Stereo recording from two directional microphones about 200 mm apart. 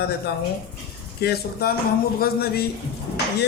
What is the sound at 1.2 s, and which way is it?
Speech, 50° left (ahead or behind).